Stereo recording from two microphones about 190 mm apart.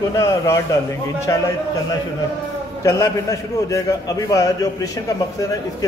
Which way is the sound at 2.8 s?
15° left (ahead or behind).